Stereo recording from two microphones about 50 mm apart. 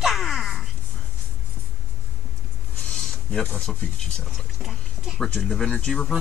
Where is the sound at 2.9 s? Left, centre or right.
Centre.